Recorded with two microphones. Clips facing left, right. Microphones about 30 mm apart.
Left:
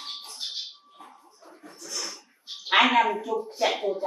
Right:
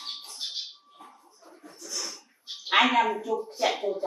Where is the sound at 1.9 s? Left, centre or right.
Left.